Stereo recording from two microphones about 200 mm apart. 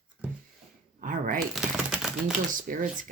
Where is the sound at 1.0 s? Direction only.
40° right (ahead or behind).